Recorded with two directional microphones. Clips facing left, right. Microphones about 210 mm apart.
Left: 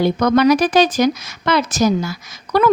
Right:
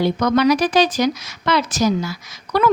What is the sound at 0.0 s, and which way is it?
A woman's voice, 50° left (ahead or behind).